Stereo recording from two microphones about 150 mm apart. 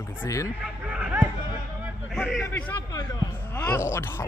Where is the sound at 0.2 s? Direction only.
20° left (ahead or behind).